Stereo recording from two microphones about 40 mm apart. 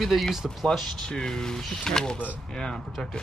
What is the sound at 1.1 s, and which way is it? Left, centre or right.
Speech, centre.